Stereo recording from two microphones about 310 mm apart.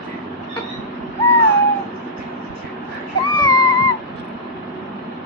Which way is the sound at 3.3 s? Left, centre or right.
Centre.